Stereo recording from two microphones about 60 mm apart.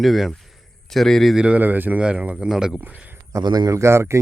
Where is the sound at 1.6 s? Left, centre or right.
Right.